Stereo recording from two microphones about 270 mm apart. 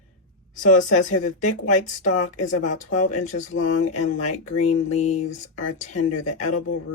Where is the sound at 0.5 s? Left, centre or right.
Left.